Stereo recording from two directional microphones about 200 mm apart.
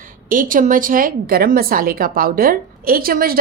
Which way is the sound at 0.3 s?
45° right (ahead or behind).